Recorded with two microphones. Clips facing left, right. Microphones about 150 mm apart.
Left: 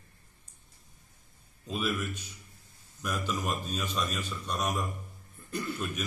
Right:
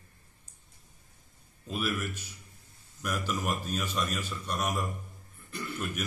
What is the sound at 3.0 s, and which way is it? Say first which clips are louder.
A man's voice: even; 10° right (ahead or behind).